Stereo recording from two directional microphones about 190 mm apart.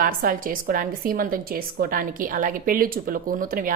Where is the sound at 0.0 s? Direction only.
50° right (ahead or behind).